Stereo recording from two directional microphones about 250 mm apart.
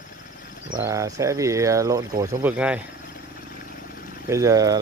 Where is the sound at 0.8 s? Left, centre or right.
Centre.